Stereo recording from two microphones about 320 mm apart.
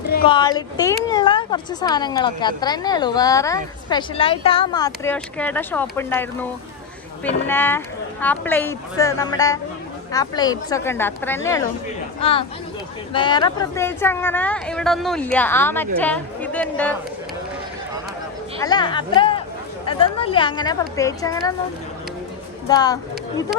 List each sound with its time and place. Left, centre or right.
0.3 s a woman's voice: centre
18.6 s a woman's voice: centre
22.7 s a woman's voice: centre